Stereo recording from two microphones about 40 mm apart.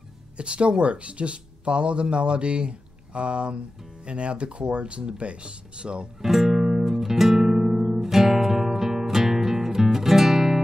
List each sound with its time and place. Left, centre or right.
0.4 s speech: right
6.2 s music: centre